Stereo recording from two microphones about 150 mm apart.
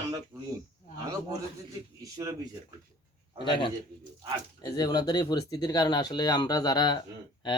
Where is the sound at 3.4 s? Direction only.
35° left (ahead or behind).